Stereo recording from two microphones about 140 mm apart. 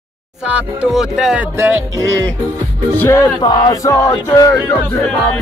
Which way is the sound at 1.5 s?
20° right (ahead or behind).